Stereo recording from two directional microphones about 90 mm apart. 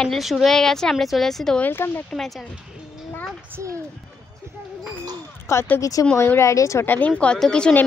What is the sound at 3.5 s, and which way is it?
Speech, 35° right (ahead or behind).